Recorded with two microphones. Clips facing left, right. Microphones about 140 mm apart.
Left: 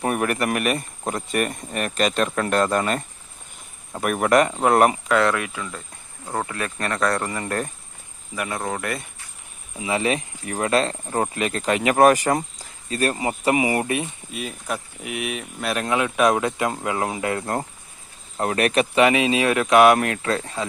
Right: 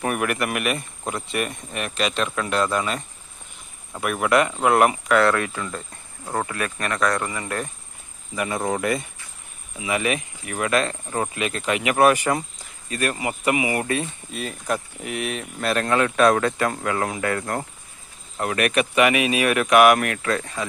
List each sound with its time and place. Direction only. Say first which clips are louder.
0.0 s speech: left 1 dB; 30° left (ahead or behind)
4.0 s speech: left 2 dB; 40° left (ahead or behind)
5.1 s speech: right 1 dB; 15° left (ahead or behind)
6.5 s speech: even; 25° left (ahead or behind)
8.4 s speech: right 3 dB; 5° right (ahead or behind)
9.7 s speech: left 1 dB; 30° left (ahead or behind)
14.3 s speech: right 3 dB; 5° left (ahead or behind); by 20.7 s 25° left (ahead or behind)